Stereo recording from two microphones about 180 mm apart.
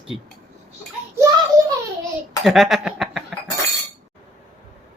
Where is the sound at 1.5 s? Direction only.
20° right (ahead or behind).